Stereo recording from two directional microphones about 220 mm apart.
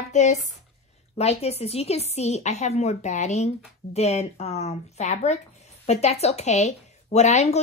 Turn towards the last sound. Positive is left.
turn(degrees=30)  # may be behind; listen again after turning